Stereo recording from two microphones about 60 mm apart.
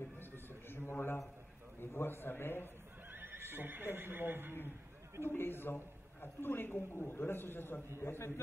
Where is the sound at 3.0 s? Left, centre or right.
Right.